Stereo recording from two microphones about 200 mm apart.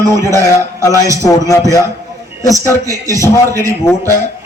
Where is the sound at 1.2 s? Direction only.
15° left (ahead or behind).